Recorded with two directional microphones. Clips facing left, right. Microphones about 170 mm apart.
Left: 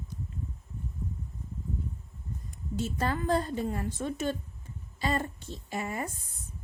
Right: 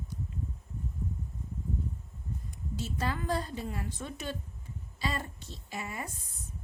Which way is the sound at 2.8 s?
50° left (ahead or behind).